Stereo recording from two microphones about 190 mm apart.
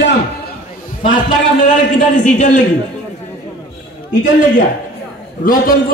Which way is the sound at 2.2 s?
40° left (ahead or behind).